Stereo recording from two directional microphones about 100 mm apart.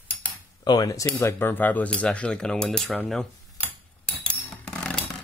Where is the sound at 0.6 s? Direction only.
40° left (ahead or behind); by 3.0 s 5° left (ahead or behind).